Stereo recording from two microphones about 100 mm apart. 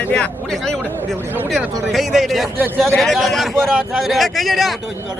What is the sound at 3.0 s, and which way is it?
Speech, centre (ahead or behind).